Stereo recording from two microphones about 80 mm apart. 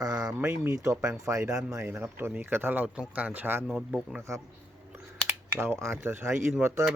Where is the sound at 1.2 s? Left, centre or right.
Right.